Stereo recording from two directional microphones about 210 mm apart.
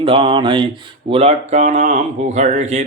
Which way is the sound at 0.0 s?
25° right (ahead or behind).